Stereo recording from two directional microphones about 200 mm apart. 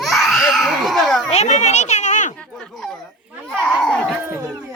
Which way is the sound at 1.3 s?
35° left (ahead or behind).